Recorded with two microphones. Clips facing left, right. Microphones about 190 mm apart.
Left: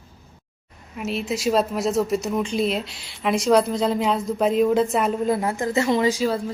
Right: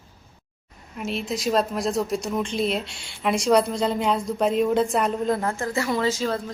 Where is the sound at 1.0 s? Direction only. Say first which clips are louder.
Left 2 dB; 5° left (ahead or behind).